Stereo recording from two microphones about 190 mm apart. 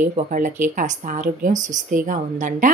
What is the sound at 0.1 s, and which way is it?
Speech, 45° right (ahead or behind).